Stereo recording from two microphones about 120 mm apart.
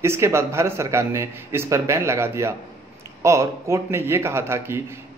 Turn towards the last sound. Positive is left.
turn(degrees=-20)  # may be behind; listen again after turning